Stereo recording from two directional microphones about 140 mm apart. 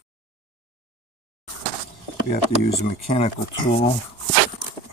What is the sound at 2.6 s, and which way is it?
Speech, 50° left (ahead or behind).